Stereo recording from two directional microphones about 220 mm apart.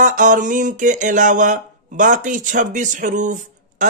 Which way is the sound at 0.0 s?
35° right (ahead or behind).